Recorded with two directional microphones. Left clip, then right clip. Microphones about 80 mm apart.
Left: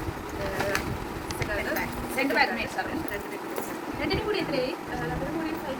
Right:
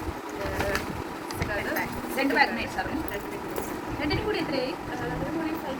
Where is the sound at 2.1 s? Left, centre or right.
Centre.